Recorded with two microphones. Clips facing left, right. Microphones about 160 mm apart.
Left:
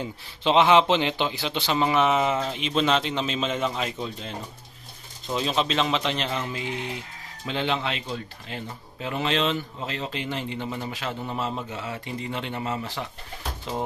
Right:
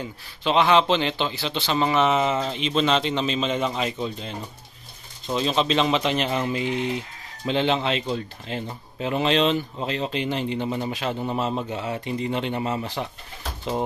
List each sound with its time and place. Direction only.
0.0 s a man's voice: 20° left (ahead or behind); by 4.3 s centre (ahead or behind)
5.3 s speech: 5° left (ahead or behind); by 13.0 s 20° right (ahead or behind)